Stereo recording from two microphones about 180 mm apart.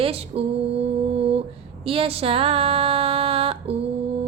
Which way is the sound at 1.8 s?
30° right (ahead or behind).